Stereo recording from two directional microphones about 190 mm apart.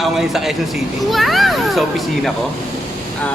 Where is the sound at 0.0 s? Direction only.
Centre (ahead or behind).